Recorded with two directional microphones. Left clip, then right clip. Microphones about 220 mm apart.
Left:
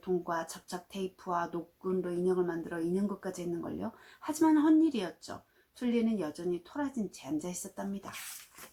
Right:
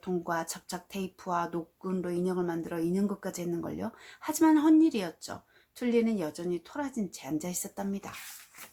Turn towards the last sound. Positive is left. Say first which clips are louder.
# right 3 dB
turn(degrees=-40)  # may be behind; listen again after turning